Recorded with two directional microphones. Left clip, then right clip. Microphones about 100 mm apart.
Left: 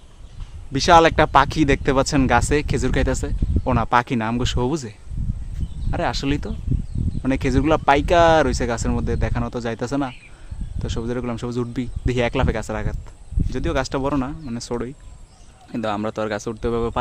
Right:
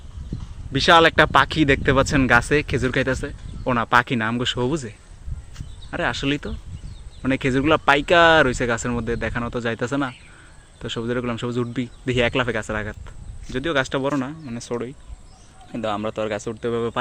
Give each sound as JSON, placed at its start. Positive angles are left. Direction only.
{"t": 0.7, "sound": "speech", "side_deg": 20}
{"t": 13.9, "sound": "speech", "side_deg": 30}
{"t": 14.4, "sound": "speech", "side_deg": 45}
{"t": 15.7, "sound": "speech", "side_deg": 60}